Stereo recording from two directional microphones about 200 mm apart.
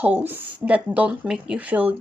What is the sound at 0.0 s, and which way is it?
Speech, 10° right (ahead or behind).